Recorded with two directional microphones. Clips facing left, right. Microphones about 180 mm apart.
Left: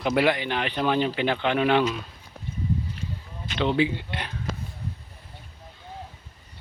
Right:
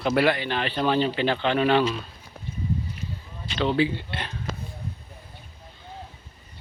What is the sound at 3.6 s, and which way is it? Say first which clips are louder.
Speech: even; 20° left (ahead or behind).